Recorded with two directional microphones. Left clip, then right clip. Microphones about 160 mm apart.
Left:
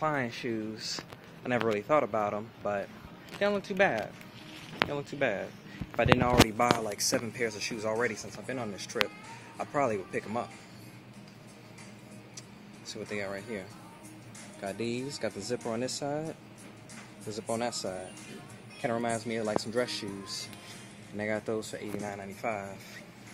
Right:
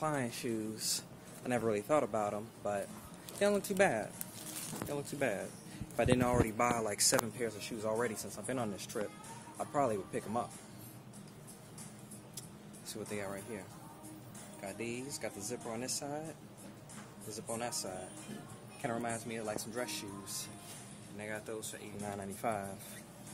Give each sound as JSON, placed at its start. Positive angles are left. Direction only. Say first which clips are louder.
{"t": 0.0, "sound": "speech", "louder": "left 6 dB", "side_deg": -15}
{"t": 12.9, "sound": "speech", "louder": "left 5 dB", "side_deg": -5}
{"t": 14.6, "sound": "speech", "louder": "left 7 dB", "side_deg": 20}
{"t": 17.5, "sound": "speech", "louder": "left 8 dB", "side_deg": 20}
{"t": 18.8, "sound": "speech", "louder": "left 7 dB", "side_deg": 15}
{"t": 21.2, "sound": "speech", "louder": "left 10 dB", "side_deg": 30}
{"t": 22.1, "sound": "speech", "louder": "even", "side_deg": -10}